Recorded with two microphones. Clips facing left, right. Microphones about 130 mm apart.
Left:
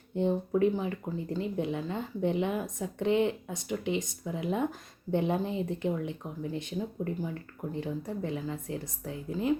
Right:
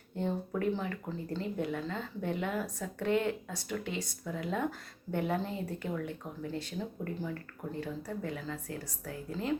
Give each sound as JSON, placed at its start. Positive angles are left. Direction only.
{"t": 0.2, "sound": "speech", "side_deg": 20}